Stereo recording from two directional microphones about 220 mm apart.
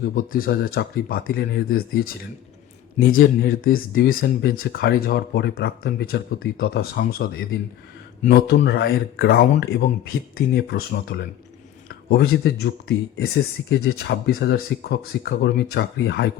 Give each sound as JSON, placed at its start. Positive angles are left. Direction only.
{"t": 0.0, "sound": "speech", "side_deg": 40}